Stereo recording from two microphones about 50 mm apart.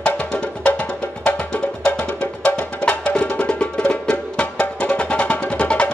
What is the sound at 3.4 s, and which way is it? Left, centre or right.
Music, centre.